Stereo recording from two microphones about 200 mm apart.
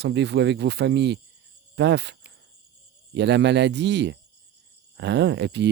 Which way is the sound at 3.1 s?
60° right (ahead or behind).